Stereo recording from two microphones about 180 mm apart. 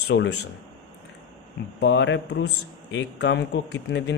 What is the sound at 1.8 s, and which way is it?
Speech, 80° left.